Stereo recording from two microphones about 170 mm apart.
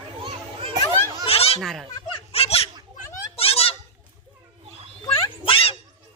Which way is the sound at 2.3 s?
35° left (ahead or behind).